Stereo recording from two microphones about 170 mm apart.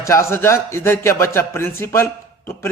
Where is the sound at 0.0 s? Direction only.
15° left (ahead or behind).